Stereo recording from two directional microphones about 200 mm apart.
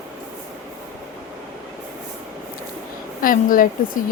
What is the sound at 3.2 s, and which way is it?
Speech, 45° left (ahead or behind).